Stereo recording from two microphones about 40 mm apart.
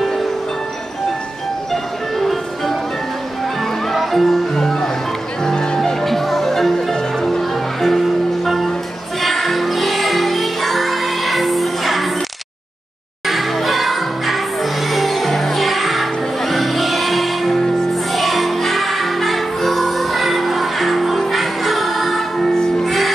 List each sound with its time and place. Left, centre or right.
1.7 s music: centre
3.9 s music: centre
13.3 s music: centre
22.4 s music: centre
22.8 s music: centre